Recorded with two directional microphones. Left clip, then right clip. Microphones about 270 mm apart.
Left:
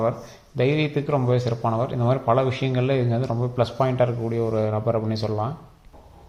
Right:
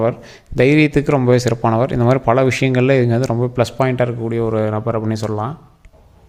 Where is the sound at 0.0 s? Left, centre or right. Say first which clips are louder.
Right 6 dB; right.